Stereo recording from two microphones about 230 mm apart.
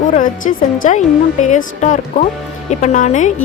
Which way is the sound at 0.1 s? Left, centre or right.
Left.